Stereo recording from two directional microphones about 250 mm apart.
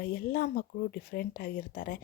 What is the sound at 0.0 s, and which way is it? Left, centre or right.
Speech, left.